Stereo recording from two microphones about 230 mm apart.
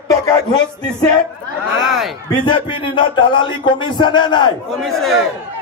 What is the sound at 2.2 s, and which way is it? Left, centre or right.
A man's voice, left.